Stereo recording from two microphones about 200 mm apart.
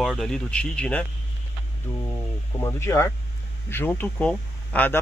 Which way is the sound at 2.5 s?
15° left (ahead or behind).